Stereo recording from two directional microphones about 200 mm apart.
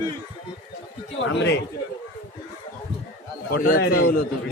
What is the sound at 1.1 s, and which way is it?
Speech, 65° left (ahead or behind).